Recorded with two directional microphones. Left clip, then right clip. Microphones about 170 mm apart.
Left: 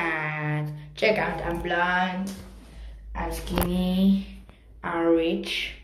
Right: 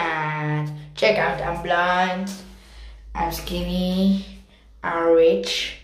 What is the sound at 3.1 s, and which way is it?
Speech, 35° right (ahead or behind).